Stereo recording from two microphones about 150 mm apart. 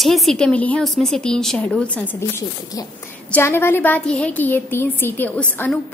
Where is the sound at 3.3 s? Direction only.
15° left (ahead or behind).